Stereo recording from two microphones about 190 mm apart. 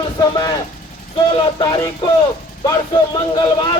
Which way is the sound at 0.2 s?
20° left (ahead or behind).